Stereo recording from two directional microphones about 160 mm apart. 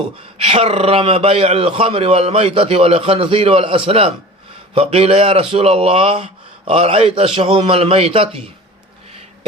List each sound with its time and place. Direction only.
0.3 s speech: 40° right (ahead or behind)